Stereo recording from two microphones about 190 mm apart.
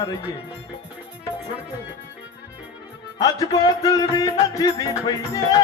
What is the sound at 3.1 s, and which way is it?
Music, 20° left (ahead or behind).